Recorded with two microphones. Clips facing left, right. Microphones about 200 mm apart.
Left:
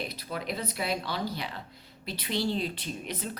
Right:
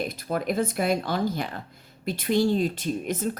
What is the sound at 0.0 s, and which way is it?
Speech, 50° right (ahead or behind).